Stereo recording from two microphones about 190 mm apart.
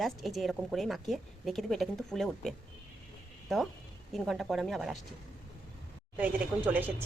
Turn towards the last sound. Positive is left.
turn(degrees=-10)  # may be behind; listen again after turning